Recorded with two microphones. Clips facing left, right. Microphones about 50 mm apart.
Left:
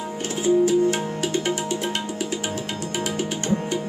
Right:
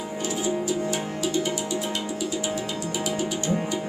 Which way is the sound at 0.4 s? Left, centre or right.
Left.